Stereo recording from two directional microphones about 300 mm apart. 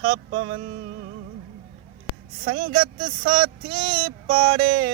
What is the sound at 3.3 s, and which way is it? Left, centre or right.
Speech, centre.